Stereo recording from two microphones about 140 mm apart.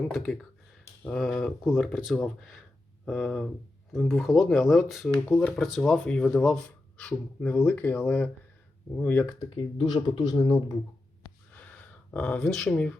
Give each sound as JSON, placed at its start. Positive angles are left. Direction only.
{"t": 0.1, "sound": "speech", "side_deg": 5}
{"t": 9.6, "sound": "speech", "side_deg": 30}
{"t": 12.1, "sound": "speech", "side_deg": 10}